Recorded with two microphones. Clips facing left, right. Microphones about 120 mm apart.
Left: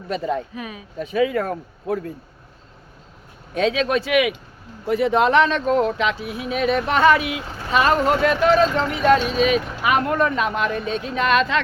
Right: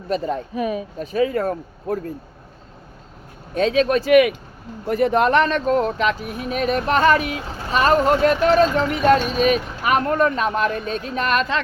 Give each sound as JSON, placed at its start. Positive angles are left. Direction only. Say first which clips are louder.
{"t": 0.1, "sound": "speech", "louder": "right 1 dB", "side_deg": -40}
{"t": 3.5, "sound": "speech", "louder": "right 2 dB", "side_deg": -40}